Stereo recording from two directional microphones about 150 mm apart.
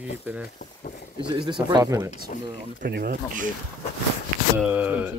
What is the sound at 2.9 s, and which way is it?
Speech, 70° right (ahead or behind).